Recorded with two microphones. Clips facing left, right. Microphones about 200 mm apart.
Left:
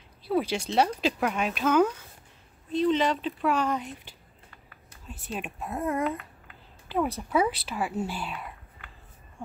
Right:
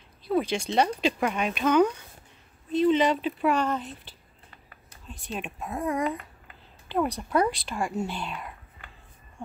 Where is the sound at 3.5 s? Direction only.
10° left (ahead or behind).